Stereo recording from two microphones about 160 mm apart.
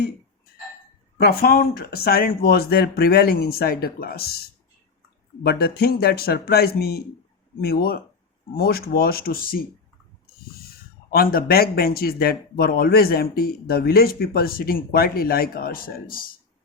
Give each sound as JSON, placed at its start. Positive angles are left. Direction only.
{"t": 1.2, "sound": "speech", "side_deg": 70}
{"t": 5.4, "sound": "speech", "side_deg": 80}
{"t": 8.5, "sound": "speech", "side_deg": 70}
{"t": 11.1, "sound": "speech", "side_deg": 65}